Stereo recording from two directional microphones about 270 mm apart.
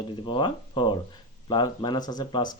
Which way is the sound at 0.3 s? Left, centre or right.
Centre.